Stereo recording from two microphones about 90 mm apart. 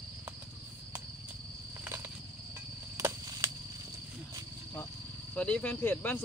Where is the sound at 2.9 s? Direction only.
35° right (ahead or behind).